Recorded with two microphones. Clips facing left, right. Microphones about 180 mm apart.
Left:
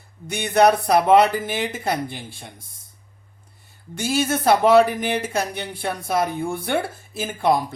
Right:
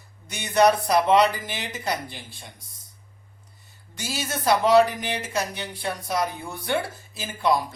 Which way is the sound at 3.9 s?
55° left (ahead or behind).